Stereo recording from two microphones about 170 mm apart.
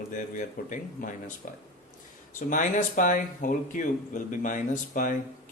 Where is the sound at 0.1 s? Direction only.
50° left (ahead or behind).